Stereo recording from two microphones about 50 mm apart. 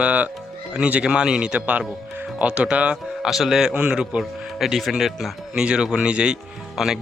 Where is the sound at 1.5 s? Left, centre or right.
Right.